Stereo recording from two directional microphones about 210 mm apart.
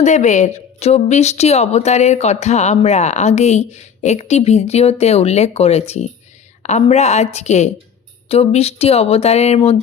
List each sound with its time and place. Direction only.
0.0 s a woman's voice: 35° left (ahead or behind)